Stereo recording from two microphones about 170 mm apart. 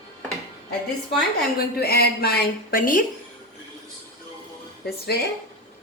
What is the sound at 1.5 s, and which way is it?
A woman's voice, 65° left (ahead or behind).